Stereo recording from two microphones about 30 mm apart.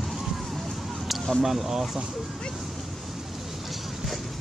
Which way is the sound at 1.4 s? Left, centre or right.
Centre.